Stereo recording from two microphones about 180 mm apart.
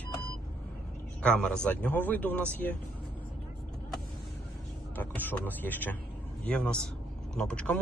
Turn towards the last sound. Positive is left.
turn(degrees=5)  # may be behind; listen again after turning